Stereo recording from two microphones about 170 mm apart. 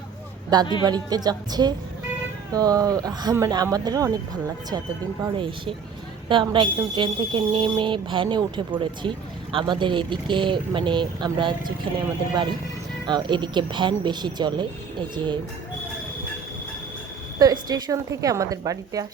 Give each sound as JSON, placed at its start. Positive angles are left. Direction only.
{"t": 0.5, "sound": "speech", "side_deg": -25}
{"t": 13.1, "sound": "speech", "side_deg": -25}
{"t": 17.4, "sound": "speech", "side_deg": -25}